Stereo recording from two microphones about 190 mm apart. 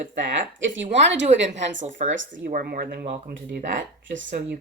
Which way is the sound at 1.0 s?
70° right (ahead or behind).